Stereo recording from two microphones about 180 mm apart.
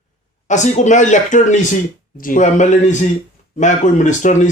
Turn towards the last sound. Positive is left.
turn(degrees=40)  # may be behind; listen again after turning